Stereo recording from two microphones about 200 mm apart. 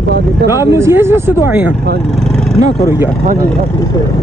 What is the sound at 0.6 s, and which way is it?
Speech, 15° right (ahead or behind).